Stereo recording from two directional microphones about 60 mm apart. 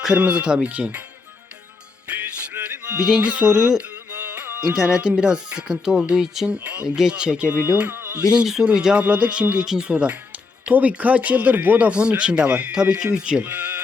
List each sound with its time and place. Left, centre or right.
0.1 s speech: right
2.0 s music: right
3.2 s speech: right
3.8 s music: right
4.6 s speech: centre
6.6 s speech: right
6.8 s speech: centre
7.9 s a sound: right
8.4 s speech: centre
9.0 s speech: right